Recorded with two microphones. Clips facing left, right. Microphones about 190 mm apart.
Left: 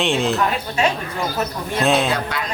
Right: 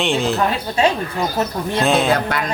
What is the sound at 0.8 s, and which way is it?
Speech, 30° right (ahead or behind).